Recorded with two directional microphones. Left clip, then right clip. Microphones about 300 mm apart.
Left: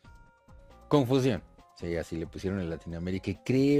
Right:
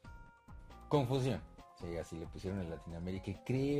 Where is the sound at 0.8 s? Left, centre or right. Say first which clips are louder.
Left 9 dB; left.